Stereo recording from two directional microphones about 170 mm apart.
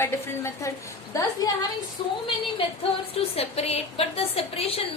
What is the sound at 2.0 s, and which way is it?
Speech, 30° left (ahead or behind).